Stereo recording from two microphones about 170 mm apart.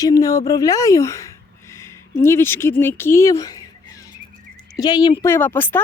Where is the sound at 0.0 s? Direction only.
20° left (ahead or behind).